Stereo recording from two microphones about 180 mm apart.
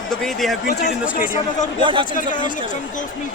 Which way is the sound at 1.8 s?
25° right (ahead or behind).